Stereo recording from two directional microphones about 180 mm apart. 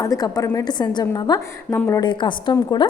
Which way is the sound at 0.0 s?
20° left (ahead or behind).